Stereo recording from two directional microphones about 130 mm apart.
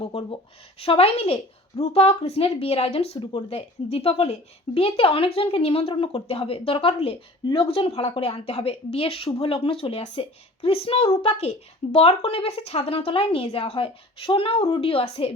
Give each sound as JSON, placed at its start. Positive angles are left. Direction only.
{"t": 0.0, "sound": "a woman's voice", "side_deg": 45}